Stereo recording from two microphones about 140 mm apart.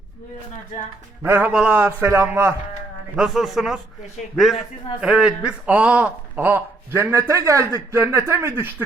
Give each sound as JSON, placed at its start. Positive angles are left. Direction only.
{"t": 1.2, "sound": "a man's voice", "side_deg": -15}
{"t": 3.2, "sound": "a man's voice", "side_deg": -5}